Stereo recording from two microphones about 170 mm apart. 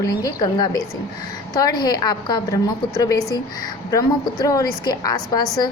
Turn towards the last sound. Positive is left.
turn(degrees=25)  # may be behind; listen again after turning